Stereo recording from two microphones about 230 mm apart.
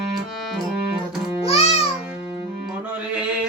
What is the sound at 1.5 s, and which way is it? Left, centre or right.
Music, left.